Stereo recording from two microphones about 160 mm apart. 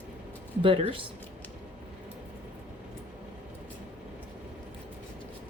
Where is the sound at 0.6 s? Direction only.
35° right (ahead or behind).